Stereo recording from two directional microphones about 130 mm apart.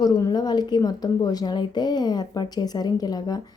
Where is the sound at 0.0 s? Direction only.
30° left (ahead or behind).